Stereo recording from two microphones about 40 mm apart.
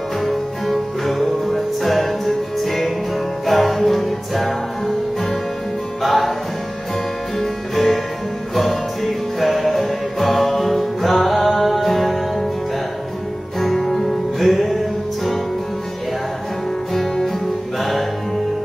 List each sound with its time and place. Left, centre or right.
0.2 s music: centre
7.3 s music: centre
13.6 s music: centre
16.9 s music: centre